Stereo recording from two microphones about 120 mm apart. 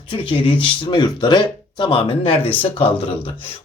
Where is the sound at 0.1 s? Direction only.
45° left (ahead or behind).